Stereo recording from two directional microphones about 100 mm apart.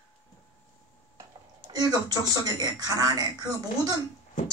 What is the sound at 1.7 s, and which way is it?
A woman's voice, 40° right (ahead or behind).